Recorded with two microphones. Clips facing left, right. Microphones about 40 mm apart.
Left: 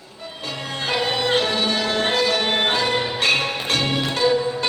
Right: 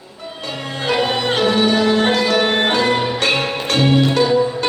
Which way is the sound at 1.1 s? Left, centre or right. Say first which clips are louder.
Right 4 dB; right.